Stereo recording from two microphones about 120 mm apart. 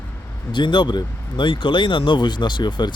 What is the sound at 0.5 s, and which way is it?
Speech, 40° left (ahead or behind).